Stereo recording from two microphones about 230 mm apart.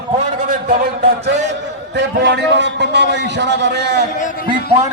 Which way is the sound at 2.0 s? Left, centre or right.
Right.